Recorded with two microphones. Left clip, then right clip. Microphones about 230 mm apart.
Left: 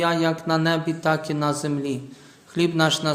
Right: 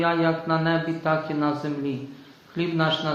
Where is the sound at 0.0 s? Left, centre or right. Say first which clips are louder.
Left 1 dB; left.